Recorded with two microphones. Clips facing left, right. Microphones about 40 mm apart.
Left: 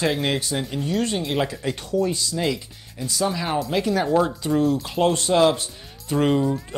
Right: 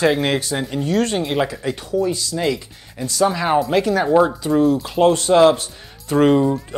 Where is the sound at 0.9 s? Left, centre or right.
Right.